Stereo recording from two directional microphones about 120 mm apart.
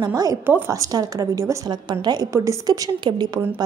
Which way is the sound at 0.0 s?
30° right (ahead or behind).